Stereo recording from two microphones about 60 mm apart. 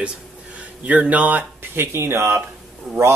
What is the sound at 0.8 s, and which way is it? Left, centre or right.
Speech, right.